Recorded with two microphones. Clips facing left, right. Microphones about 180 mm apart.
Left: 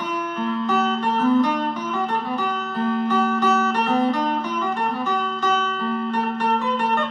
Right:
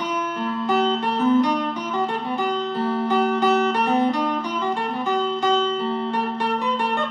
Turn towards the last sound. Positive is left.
turn(degrees=-20)  # may be behind; listen again after turning